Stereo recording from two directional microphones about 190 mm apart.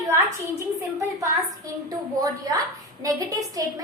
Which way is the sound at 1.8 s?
20° right (ahead or behind).